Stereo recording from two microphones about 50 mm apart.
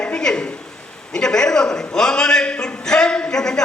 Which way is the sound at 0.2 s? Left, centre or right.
Centre.